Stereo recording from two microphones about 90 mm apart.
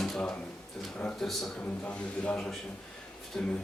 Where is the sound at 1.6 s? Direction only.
15° left (ahead or behind).